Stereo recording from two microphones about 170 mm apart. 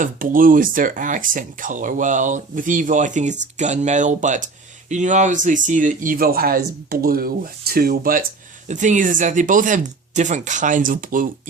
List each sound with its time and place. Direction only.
0.0 s speech: 55° right (ahead or behind)
8.6 s speech: 45° right (ahead or behind)